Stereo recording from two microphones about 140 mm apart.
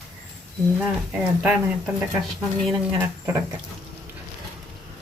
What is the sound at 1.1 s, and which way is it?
Speech, 10° right (ahead or behind).